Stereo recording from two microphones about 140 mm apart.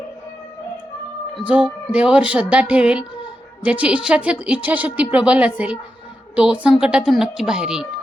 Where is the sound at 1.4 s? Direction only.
5° right (ahead or behind).